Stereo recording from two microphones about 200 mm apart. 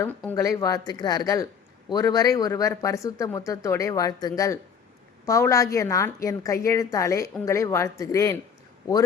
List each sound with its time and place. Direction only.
0.0 s speech: 10° left (ahead or behind)